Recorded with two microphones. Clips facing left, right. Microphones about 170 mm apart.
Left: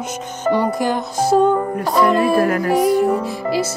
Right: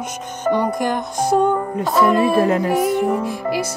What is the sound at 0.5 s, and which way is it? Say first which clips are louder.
Music: left 2 dB; 10° left (ahead or behind).